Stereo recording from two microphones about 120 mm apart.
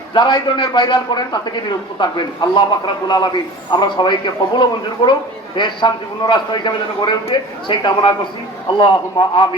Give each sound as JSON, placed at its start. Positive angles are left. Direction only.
{"t": 0.1, "sound": "a man's voice", "side_deg": 40}